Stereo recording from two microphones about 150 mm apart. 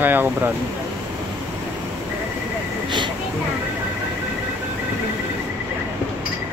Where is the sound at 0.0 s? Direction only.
15° right (ahead or behind).